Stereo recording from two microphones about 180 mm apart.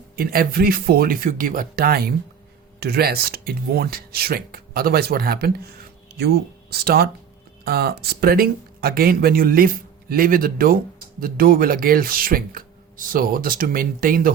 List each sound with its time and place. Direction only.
0.2 s speech: 55° right (ahead or behind)